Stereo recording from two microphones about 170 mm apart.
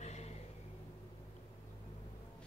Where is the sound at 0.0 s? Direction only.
40° left (ahead or behind).